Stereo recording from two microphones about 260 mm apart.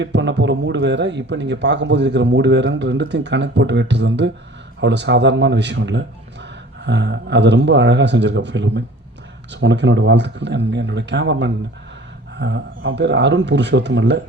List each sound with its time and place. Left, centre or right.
0.0 s speech: right